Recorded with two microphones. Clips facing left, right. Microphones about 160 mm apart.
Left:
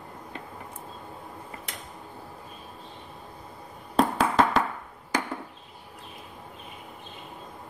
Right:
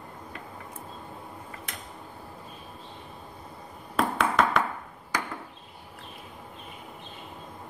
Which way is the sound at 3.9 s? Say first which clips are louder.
Left 3 dB; 30° left (ahead or behind).